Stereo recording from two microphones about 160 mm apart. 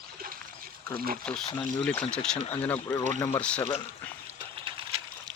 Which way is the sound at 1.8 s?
10° left (ahead or behind).